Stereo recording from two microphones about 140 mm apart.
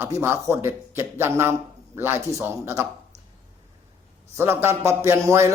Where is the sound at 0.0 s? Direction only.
20° right (ahead or behind).